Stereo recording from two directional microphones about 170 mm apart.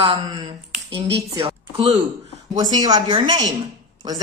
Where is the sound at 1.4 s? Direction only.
35° right (ahead or behind).